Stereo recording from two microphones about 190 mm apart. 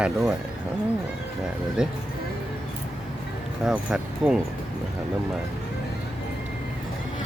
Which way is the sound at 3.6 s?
5° right (ahead or behind).